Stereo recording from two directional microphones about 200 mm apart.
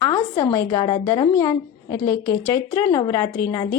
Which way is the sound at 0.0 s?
15° left (ahead or behind).